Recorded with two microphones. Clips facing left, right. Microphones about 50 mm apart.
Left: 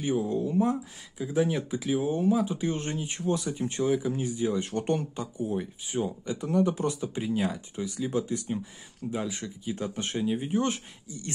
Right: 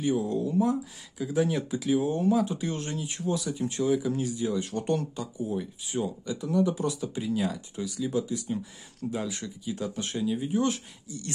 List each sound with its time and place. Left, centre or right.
0.0 s speech: left
1.1 s speech: centre
6.2 s speech: left
9.1 s speech: centre